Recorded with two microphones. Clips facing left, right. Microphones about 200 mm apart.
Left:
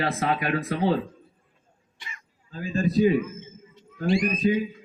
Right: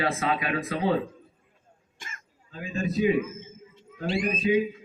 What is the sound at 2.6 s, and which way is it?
Speech, 35° left (ahead or behind).